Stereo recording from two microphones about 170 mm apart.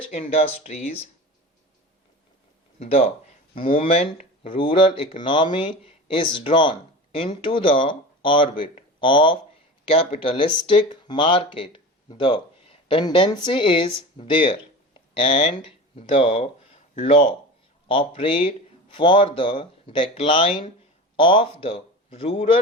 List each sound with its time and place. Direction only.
0.1 s speech: 40° left (ahead or behind)
2.7 s speech: 35° left (ahead or behind)